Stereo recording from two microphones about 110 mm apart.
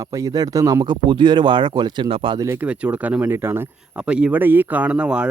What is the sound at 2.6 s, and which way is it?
Speech, 15° right (ahead or behind).